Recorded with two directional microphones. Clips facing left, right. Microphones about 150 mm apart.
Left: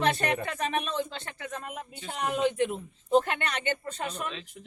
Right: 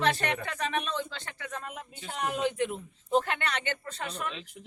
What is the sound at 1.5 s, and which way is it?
Speech, 20° left (ahead or behind).